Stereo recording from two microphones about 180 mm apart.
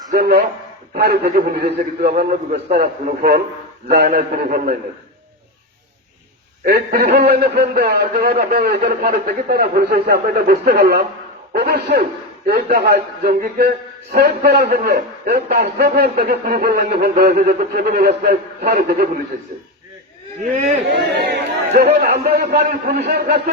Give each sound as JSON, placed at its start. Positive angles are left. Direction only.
{"t": 0.1, "sound": "a sound", "side_deg": -65}
{"t": 0.9, "sound": "a man's voice", "side_deg": -60}
{"t": 4.2, "sound": "a man's voice", "side_deg": -45}
{"t": 6.7, "sound": "a man's voice", "side_deg": -55}
{"t": 20.5, "sound": "speech", "side_deg": -40}
{"t": 20.9, "sound": "speech", "side_deg": -70}
{"t": 21.7, "sound": "a man's voice", "side_deg": -40}
{"t": 22.0, "sound": "a man's voice", "side_deg": -60}